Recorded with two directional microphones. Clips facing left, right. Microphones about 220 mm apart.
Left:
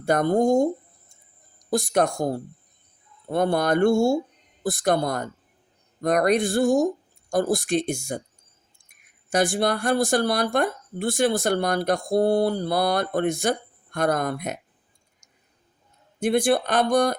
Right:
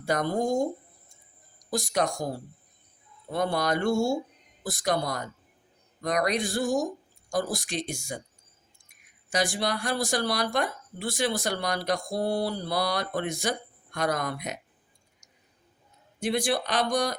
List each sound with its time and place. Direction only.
0.0 s speech: 55° left (ahead or behind)
1.7 s speech: 55° left (ahead or behind)
9.3 s speech: 50° left (ahead or behind)
16.2 s speech: 55° left (ahead or behind)